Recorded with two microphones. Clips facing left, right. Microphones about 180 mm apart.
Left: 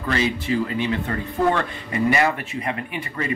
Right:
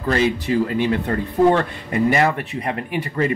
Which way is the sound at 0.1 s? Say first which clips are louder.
Right 4 dB; 50° right (ahead or behind).